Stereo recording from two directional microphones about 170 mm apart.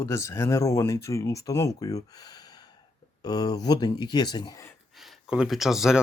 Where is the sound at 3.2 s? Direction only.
25° left (ahead or behind).